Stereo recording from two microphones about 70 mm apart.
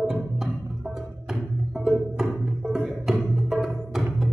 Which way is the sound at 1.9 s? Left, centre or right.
Centre.